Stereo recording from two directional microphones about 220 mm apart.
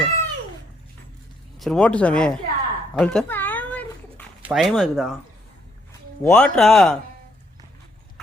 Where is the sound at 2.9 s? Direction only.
5° left (ahead or behind).